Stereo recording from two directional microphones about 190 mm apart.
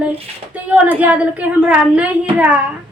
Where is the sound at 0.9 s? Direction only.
10° right (ahead or behind).